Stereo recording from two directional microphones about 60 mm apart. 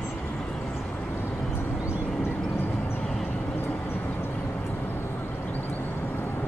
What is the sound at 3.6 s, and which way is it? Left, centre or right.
Vehicle, left.